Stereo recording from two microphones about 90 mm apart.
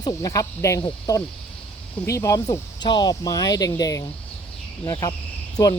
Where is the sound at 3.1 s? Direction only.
40° left (ahead or behind).